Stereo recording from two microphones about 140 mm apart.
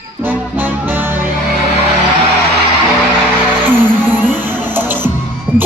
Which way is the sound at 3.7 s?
15° right (ahead or behind).